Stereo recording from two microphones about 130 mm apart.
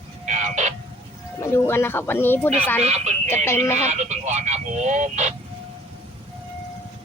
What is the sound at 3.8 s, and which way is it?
Speech, 60° right (ahead or behind).